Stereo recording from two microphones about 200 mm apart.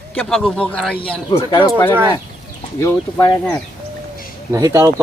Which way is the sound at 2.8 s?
15° left (ahead or behind).